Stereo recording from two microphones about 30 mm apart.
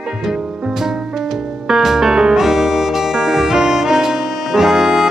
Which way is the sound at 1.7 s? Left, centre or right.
Centre.